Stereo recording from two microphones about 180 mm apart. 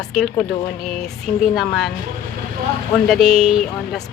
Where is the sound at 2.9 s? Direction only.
Centre (ahead or behind).